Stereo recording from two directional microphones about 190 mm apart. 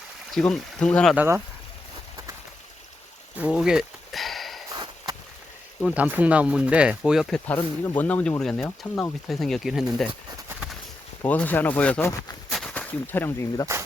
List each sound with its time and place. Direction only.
0.3 s speech: 5° left (ahead or behind)
1.1 s speech: 10° right (ahead or behind)
3.3 s a sound: 5° right (ahead or behind)
4.7 s sniff: 20° right (ahead or behind)
5.8 s speech: 5° right (ahead or behind)
11.2 s speech: 10° left (ahead or behind)